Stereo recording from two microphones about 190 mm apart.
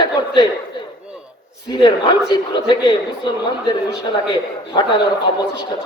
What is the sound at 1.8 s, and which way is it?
Speech, 20° left (ahead or behind).